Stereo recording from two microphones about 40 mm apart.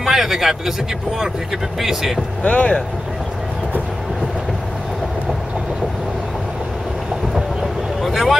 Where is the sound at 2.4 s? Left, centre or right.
Left.